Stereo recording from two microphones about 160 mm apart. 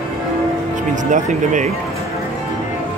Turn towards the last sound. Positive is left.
turn(degrees=-50)  # may be behind; listen again after turning